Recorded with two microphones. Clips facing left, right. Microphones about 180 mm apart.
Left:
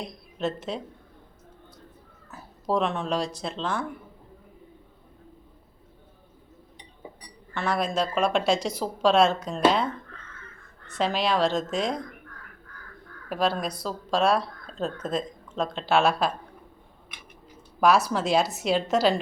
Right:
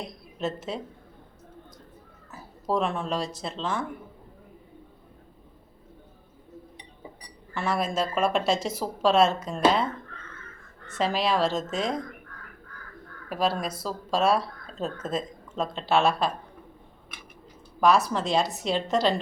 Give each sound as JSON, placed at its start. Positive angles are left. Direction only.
{"t": 0.0, "sound": "speech", "side_deg": -5}
{"t": 2.3, "sound": "speech", "side_deg": -5}
{"t": 7.5, "sound": "speech", "side_deg": -5}
{"t": 13.2, "sound": "speech", "side_deg": 0}
{"t": 17.7, "sound": "speech", "side_deg": 0}